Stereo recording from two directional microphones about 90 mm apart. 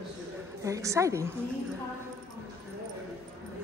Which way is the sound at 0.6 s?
35° right (ahead or behind).